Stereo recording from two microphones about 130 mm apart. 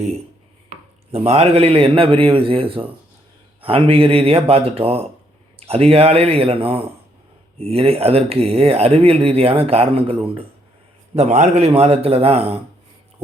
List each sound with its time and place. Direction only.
1.1 s speech: 50° right (ahead or behind)